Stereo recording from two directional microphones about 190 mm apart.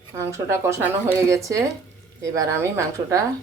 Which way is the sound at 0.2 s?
15° right (ahead or behind).